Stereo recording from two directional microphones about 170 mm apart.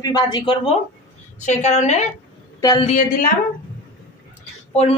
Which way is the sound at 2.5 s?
20° left (ahead or behind).